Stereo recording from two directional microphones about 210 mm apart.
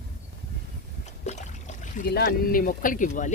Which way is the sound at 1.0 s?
35° left (ahead or behind).